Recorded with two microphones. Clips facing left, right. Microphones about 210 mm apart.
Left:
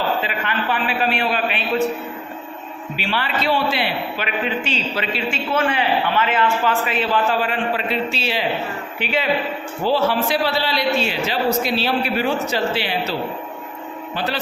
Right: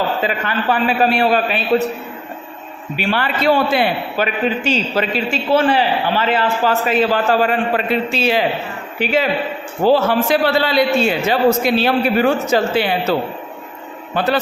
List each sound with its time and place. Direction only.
0.2 s a man's voice: 40° right (ahead or behind)
3.0 s a man's voice: 50° right (ahead or behind)